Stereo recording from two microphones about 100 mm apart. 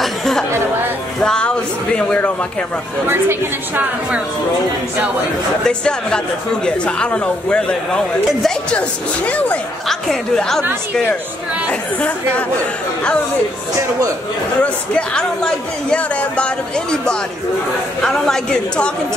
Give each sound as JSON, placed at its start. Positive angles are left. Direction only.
{"t": 0.0, "sound": "chatter", "side_deg": 5}
{"t": 1.2, "sound": "music", "side_deg": 10}
{"t": 3.1, "sound": "a woman's voice", "side_deg": -20}
{"t": 5.7, "sound": "a woman's voice", "side_deg": 10}
{"t": 12.0, "sound": "speech", "side_deg": 15}
{"t": 14.6, "sound": "speech", "side_deg": 10}